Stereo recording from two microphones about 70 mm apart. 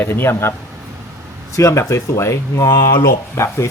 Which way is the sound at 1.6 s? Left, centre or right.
Left.